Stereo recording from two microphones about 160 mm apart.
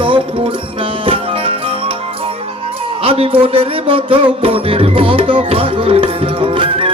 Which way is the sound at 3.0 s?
35° right (ahead or behind).